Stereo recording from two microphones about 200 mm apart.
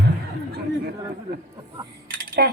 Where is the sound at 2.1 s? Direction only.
55° right (ahead or behind).